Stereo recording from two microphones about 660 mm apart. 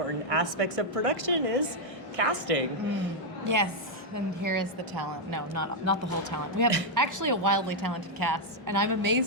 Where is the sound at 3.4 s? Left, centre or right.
Right.